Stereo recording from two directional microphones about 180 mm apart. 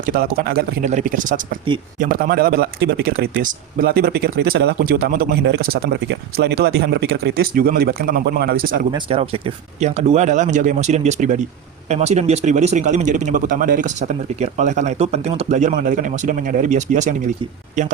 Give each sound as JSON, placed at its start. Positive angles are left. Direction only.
{"t": 0.0, "sound": "speech", "side_deg": -55}
{"t": 0.9, "sound": "speech", "side_deg": -45}
{"t": 8.9, "sound": "a man's voice", "side_deg": -30}